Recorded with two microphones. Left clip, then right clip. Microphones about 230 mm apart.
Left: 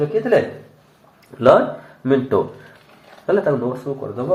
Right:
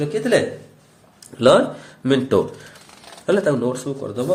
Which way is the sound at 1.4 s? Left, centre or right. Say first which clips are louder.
Left 1 dB; right.